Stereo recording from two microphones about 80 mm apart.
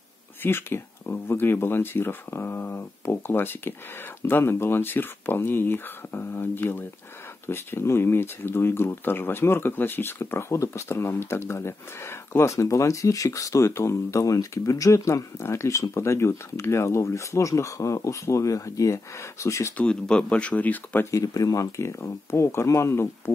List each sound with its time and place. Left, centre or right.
0.4 s speech: left
19.8 s speech: centre
21.1 s speech: left